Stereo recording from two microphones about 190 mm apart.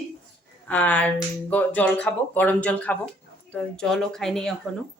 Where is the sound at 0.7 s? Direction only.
5° left (ahead or behind).